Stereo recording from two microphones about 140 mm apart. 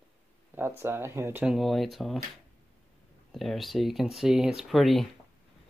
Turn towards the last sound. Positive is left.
turn(degrees=0)  # may be behind; listen again after turning